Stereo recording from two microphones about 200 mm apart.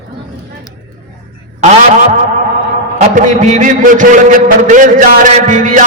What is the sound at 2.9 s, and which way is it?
A man's voice, 40° right (ahead or behind).